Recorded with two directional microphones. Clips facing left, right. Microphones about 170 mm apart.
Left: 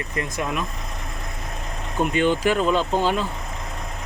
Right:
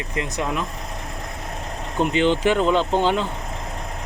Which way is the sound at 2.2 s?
20° right (ahead or behind).